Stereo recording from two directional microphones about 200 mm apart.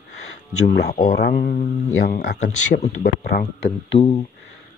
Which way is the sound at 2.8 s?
35° left (ahead or behind).